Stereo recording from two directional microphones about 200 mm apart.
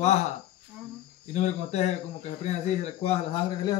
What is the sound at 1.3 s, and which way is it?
Speech, 35° left (ahead or behind).